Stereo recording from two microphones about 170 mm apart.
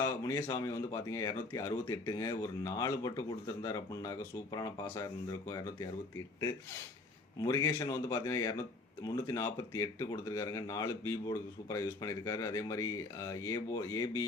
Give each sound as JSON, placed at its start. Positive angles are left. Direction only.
{"t": 0.0, "sound": "speech", "side_deg": 20}
{"t": 7.4, "sound": "speech", "side_deg": 20}